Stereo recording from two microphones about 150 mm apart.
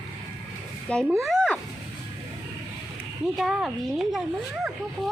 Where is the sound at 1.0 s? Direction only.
20° right (ahead or behind).